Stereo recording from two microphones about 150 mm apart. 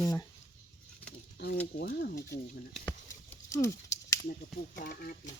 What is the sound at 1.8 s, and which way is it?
Speech, 90° left.